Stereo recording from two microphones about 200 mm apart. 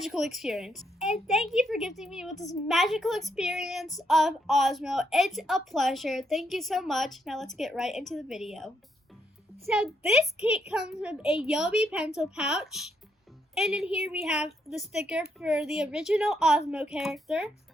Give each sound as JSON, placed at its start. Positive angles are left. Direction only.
{"t": 0.0, "sound": "a woman's voice", "side_deg": 0}
{"t": 2.3, "sound": "a woman's voice", "side_deg": 15}
{"t": 2.6, "sound": "a woman's voice", "side_deg": 0}